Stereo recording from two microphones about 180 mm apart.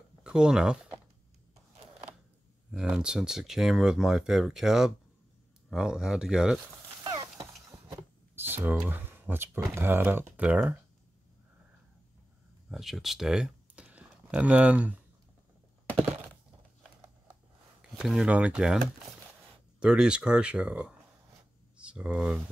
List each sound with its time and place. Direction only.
0.2 s speech: 5° right (ahead or behind)
2.7 s speech: 5° right (ahead or behind)
7.1 s a sound: 20° right (ahead or behind)
8.8 s speech: 10° right (ahead or behind)
12.6 s speech: centre (ahead or behind)
17.9 s speech: 5° right (ahead or behind)